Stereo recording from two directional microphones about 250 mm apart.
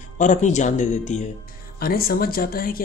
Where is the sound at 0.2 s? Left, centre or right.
Left.